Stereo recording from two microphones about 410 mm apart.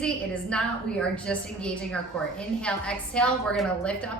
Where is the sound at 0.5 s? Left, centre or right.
Centre.